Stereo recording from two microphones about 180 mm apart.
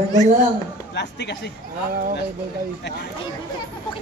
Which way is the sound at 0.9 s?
70° left (ahead or behind).